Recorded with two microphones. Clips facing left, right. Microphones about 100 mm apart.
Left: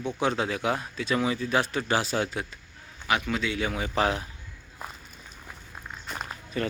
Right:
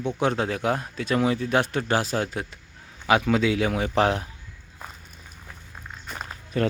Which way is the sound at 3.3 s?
90° right.